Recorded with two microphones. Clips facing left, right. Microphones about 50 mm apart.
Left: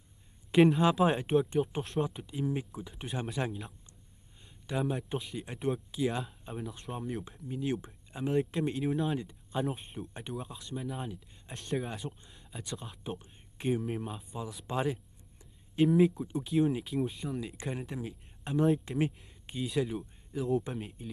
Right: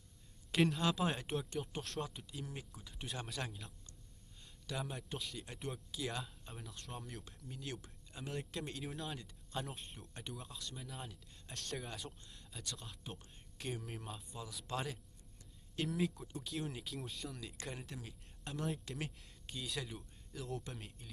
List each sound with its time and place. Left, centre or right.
0.5 s speech: left
15.9 s speech: centre